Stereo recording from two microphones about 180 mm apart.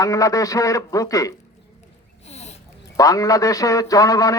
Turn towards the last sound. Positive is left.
turn(degrees=20)  # may be behind; listen again after turning